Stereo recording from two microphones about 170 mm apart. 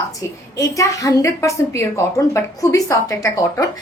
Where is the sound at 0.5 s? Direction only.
20° left (ahead or behind).